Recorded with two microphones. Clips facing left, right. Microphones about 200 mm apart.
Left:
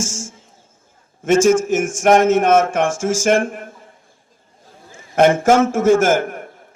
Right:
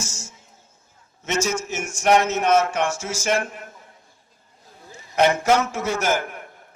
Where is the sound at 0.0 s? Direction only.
50° left (ahead or behind).